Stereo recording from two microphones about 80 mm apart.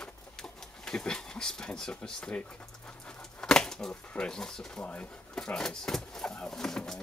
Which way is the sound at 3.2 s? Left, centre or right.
Centre.